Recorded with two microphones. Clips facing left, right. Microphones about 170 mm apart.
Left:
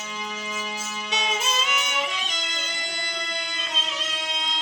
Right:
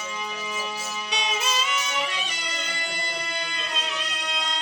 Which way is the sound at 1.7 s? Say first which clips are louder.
Even; 20° left (ahead or behind).